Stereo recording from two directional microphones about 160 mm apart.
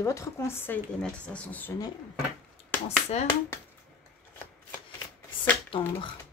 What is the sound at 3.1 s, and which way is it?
Speech, 40° left (ahead or behind).